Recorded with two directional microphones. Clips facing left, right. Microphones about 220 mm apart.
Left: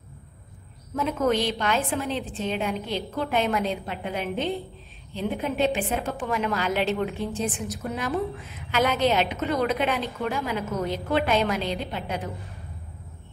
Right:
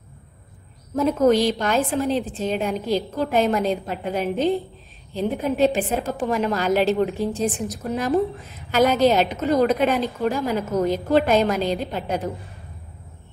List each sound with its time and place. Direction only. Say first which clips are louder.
0.9 s a woman's voice: right 6 dB; 40° right (ahead or behind)
8.7 s a woman's voice: right 5 dB; 40° right (ahead or behind)